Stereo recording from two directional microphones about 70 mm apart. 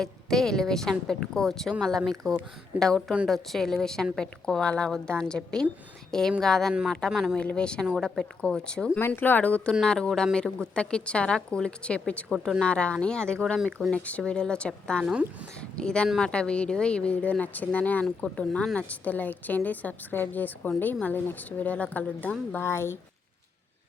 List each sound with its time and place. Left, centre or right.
0.0 s a woman's voice: centre
7.1 s speech: centre
7.3 s a woman's voice: centre
9.0 s a woman's voice: left; by 12.2 s centre
12.3 s speech: centre
12.6 s a woman's voice: centre
18.9 s speech: left
22.6 s speech: left